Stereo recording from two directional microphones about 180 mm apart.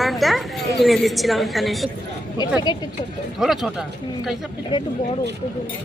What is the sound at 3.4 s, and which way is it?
Speech, centre (ahead or behind).